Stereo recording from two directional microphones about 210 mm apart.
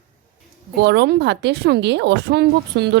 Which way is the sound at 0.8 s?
55° right (ahead or behind).